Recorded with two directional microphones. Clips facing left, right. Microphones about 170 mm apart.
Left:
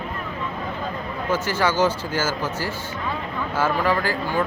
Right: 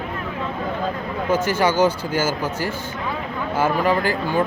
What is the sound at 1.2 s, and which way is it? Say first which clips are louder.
Speech: right 3 dB; 15° right (ahead or behind).